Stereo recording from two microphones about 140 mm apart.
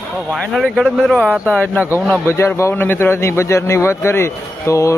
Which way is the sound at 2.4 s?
20° left (ahead or behind).